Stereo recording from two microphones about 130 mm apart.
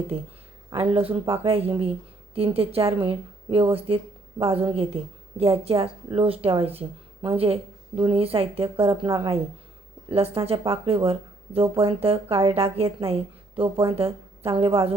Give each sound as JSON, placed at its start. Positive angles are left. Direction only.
{"t": 0.1, "sound": "speech", "side_deg": -50}